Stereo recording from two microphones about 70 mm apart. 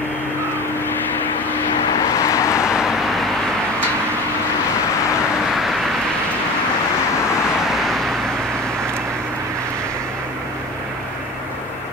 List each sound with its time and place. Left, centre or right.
2.1 s vehicle: left
2.7 s vehicle: centre